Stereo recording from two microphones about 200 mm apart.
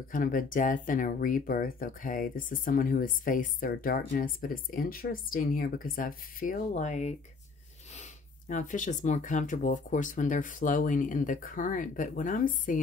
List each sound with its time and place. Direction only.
0.1 s speech: 45° left (ahead or behind)